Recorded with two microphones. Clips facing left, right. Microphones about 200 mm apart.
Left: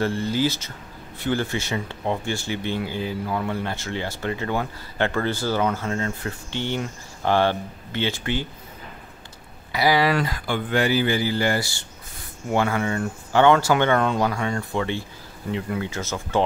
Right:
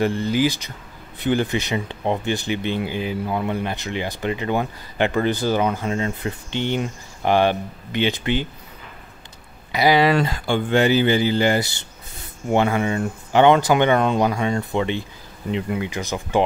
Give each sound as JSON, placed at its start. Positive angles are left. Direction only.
{"t": 0.0, "sound": "speech", "side_deg": -15}
{"t": 9.7, "sound": "speech", "side_deg": -20}